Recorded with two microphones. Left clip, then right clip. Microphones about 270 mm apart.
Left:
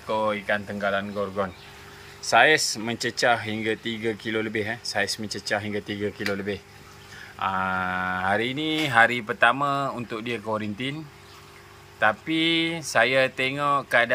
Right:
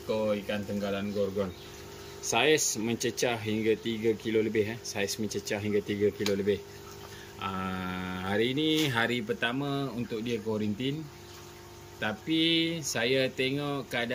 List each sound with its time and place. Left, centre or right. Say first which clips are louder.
0.3 s speech: left 5 dB; centre
2.4 s speech: left 6 dB; centre
4.4 s speech: right 1 dB; left
4.6 s speech: left 7 dB; centre
12.0 s speech: left 7 dB; centre